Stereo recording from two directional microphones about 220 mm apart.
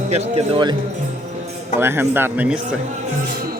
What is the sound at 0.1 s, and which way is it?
Speech, 25° right (ahead or behind).